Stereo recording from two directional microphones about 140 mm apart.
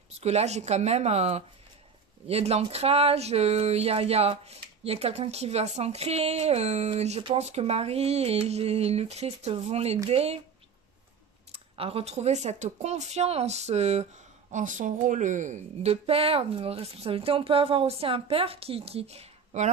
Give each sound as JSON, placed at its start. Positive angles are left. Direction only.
{"t": 0.2, "sound": "speech", "side_deg": -50}
{"t": 11.5, "sound": "speech", "side_deg": -45}
{"t": 14.5, "sound": "speech", "side_deg": -65}